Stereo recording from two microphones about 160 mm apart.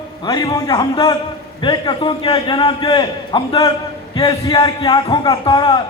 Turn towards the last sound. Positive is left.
turn(degrees=30)  # may be behind; listen again after turning